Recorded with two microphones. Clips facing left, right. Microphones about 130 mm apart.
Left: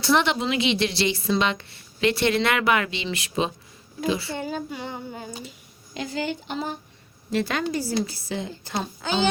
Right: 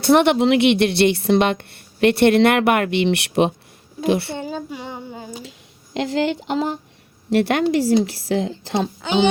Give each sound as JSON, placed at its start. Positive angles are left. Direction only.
{"t": 0.0, "sound": "a woman's voice", "side_deg": -55}
{"t": 4.4, "sound": "female singing", "side_deg": -20}
{"t": 5.4, "sound": "speech", "side_deg": -85}
{"t": 7.3, "sound": "a woman's voice", "side_deg": -70}